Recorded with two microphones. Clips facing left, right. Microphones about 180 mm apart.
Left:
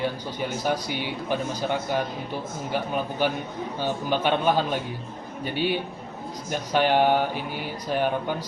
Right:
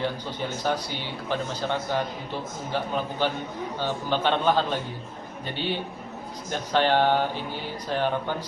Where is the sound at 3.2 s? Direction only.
15° left (ahead or behind).